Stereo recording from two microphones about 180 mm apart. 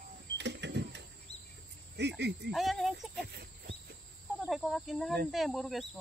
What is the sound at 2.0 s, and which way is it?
Speech, 70° right (ahead or behind).